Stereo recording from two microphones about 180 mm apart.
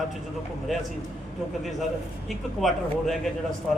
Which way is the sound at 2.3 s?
Centre (ahead or behind).